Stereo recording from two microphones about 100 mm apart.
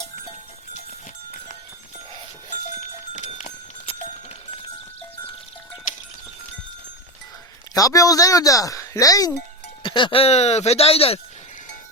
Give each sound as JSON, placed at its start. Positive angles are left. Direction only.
{"t": 3.2, "sound": "clip-clop", "side_deg": 90}
{"t": 7.7, "sound": "speech", "side_deg": 35}
{"t": 9.8, "sound": "speech", "side_deg": 55}